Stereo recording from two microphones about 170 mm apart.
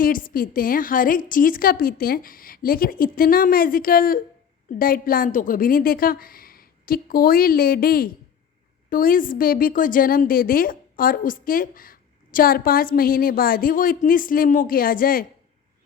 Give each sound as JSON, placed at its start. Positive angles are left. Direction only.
{"t": 0.0, "sound": "a woman's voice", "side_deg": 55}